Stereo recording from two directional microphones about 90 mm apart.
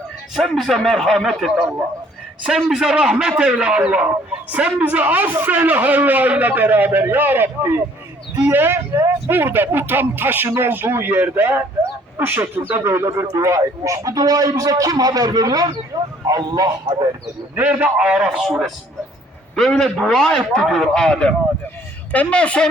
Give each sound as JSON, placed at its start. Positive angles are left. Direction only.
{"t": 0.3, "sound": "a man's voice", "side_deg": 0}
{"t": 16.8, "sound": "a man's voice", "side_deg": -55}
{"t": 17.5, "sound": "speech", "side_deg": -20}
{"t": 18.3, "sound": "a man's voice", "side_deg": 0}
{"t": 19.8, "sound": "a man's voice", "side_deg": 0}